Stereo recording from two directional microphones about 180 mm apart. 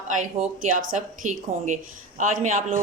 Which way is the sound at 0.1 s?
45° right (ahead or behind).